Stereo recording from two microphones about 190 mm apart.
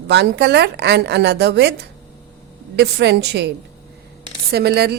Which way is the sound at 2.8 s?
60° right (ahead or behind).